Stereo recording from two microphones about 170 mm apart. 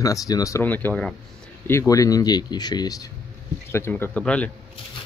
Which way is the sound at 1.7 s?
20° left (ahead or behind).